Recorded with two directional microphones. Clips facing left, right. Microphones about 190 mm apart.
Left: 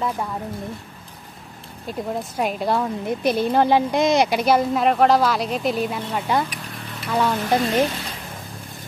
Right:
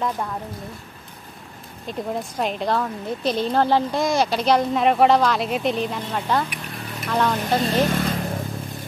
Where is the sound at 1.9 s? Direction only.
5° left (ahead or behind).